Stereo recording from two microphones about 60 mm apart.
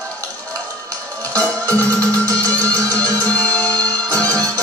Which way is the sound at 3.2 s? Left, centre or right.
Left.